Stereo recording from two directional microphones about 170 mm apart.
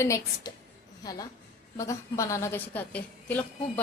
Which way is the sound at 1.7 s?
20° left (ahead or behind).